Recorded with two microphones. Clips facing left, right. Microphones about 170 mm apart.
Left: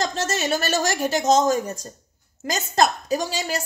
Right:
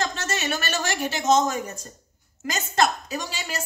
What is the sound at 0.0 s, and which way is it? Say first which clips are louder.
A woman's voice: left 3 dB; 40° left (ahead or behind).